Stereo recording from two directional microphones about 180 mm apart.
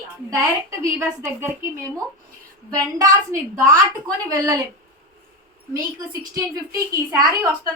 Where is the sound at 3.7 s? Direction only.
20° right (ahead or behind).